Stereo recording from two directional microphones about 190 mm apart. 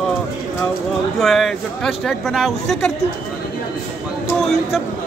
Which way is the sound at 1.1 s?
Centre (ahead or behind).